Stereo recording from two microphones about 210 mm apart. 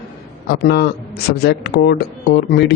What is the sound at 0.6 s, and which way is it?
Speech, 50° left (ahead or behind).